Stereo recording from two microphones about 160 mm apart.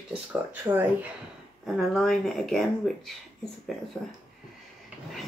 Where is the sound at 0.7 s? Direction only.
15° right (ahead or behind).